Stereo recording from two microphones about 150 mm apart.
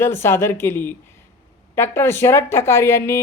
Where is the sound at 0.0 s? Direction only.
15° left (ahead or behind).